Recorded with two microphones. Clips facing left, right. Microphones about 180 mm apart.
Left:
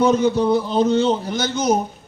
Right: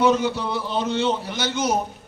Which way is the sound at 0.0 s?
40° left (ahead or behind).